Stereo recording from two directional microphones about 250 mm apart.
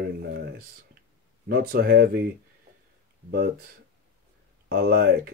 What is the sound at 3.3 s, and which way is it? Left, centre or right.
Speech, right.